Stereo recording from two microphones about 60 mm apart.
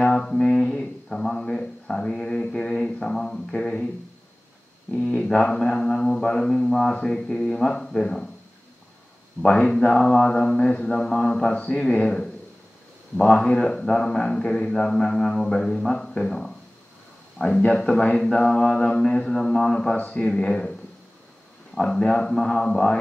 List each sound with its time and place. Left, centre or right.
0.0 s speech: centre
4.9 s a man's voice: centre
9.4 s a man's voice: centre
17.6 s a man's voice: centre
21.7 s a man's voice: centre